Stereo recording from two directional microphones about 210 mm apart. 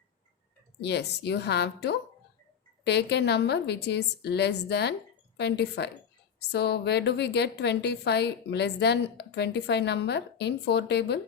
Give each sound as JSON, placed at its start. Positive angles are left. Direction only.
{"t": 0.8, "sound": "a woman's voice", "side_deg": 55}